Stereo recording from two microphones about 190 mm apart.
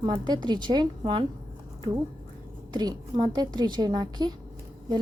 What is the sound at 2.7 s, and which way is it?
A woman's voice, 20° right (ahead or behind).